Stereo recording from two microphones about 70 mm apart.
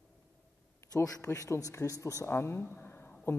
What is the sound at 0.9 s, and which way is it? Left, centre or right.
A man's voice, left.